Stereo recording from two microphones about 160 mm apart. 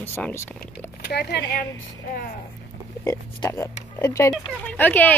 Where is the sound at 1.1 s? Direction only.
90° left.